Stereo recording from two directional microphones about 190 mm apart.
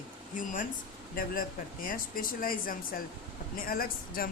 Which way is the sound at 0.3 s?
45° left (ahead or behind).